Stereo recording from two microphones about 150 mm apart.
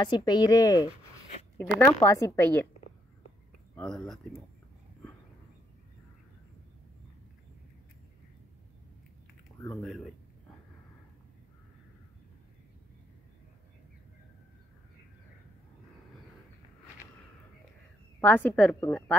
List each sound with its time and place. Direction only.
0.0 s speech: 30° left (ahead or behind)
3.7 s speech: 5° left (ahead or behind)
9.8 s speech: centre (ahead or behind)
18.2 s a woman's voice: 15° left (ahead or behind)